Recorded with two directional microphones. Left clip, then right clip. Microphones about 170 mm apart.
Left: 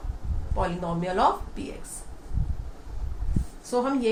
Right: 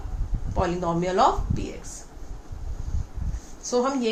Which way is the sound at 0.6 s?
40° right (ahead or behind).